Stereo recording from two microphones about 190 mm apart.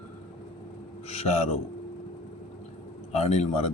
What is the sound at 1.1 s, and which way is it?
Speech, 35° left (ahead or behind).